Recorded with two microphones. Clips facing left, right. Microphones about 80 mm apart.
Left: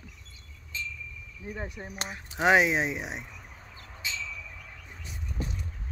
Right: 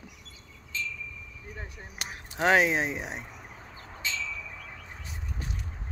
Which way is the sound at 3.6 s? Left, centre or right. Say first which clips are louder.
Right 3 dB; right.